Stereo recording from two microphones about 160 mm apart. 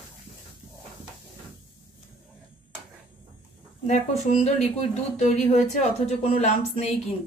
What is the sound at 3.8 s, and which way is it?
Speech, 45° left (ahead or behind).